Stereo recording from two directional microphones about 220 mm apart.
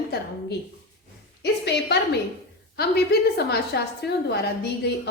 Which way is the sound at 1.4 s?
50° left (ahead or behind).